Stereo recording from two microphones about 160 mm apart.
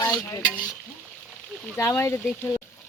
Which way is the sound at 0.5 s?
5° left (ahead or behind).